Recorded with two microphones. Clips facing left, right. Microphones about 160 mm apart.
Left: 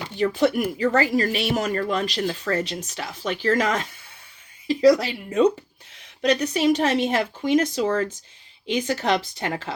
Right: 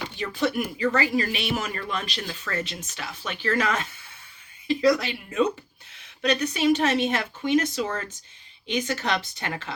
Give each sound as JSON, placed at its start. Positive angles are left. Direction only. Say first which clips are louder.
{"t": 0.8, "sound": "speech", "louder": "left 3 dB", "side_deg": 40}